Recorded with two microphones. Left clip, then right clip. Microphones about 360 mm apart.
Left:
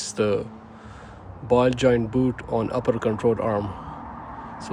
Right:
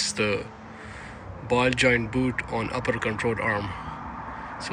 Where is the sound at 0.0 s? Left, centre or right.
Centre.